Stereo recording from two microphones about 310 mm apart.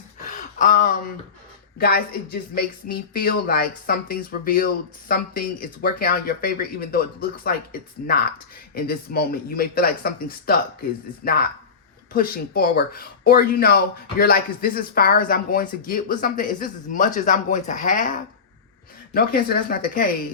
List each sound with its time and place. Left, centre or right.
0.3 s gasp: left
1.8 s speech: left
12.1 s speech: left